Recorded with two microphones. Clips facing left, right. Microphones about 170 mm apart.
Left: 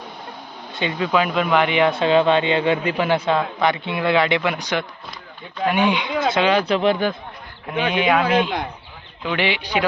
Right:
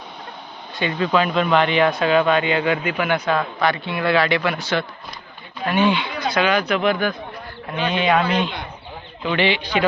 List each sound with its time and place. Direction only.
0.8 s speech: 15° left (ahead or behind)
1.9 s a man's voice: 25° left (ahead or behind)
7.7 s speech: 15° left (ahead or behind)